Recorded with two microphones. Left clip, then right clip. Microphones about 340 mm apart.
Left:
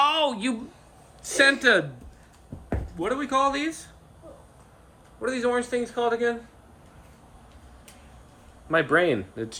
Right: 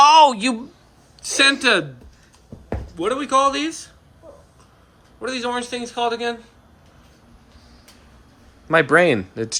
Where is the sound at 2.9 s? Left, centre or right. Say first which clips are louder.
Right 6 dB; centre.